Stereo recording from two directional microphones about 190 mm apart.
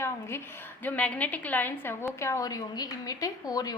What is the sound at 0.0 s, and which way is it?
A woman's voice, 15° left (ahead or behind).